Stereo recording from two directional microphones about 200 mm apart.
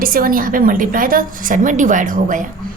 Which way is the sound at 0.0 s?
45° right (ahead or behind).